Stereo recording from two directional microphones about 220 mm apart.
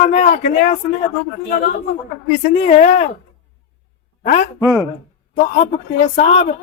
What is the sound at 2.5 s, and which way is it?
Speech, 35° left (ahead or behind).